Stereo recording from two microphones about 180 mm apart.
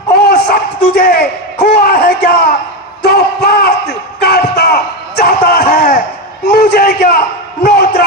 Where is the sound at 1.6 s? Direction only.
60° left (ahead or behind).